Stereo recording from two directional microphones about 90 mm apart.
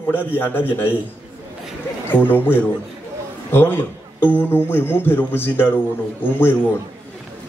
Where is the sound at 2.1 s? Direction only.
25° left (ahead or behind).